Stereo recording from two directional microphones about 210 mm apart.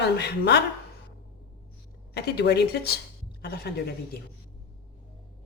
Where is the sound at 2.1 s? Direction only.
50° left (ahead or behind).